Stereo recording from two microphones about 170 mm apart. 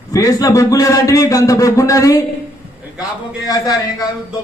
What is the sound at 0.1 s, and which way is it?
A man's voice, 20° left (ahead or behind).